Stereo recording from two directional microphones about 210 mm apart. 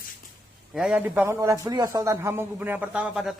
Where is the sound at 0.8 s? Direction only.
5° right (ahead or behind).